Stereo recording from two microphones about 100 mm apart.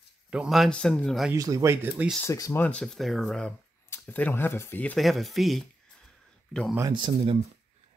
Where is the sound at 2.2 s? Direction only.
35° left (ahead or behind).